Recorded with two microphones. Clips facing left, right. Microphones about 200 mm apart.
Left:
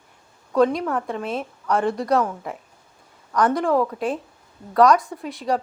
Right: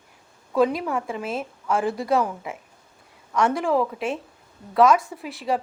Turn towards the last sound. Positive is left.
turn(degrees=-5)  # may be behind; listen again after turning